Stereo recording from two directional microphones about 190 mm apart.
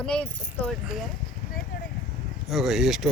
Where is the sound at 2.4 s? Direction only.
Centre (ahead or behind).